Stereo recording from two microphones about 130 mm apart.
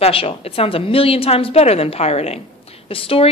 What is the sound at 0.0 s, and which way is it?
A woman's voice, 45° left (ahead or behind).